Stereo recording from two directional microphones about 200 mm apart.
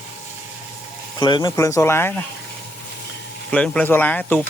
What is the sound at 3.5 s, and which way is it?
Speech, 5° left (ahead or behind).